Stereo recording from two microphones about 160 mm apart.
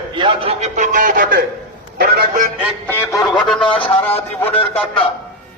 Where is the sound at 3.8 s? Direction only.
35° left (ahead or behind).